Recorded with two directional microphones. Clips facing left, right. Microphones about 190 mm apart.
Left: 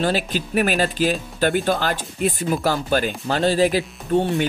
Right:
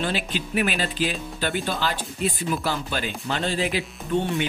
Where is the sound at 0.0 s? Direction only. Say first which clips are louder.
Left 5 dB; 40° left (ahead or behind).